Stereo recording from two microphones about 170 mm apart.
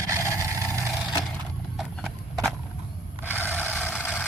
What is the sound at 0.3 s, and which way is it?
Vehicle, 15° left (ahead or behind).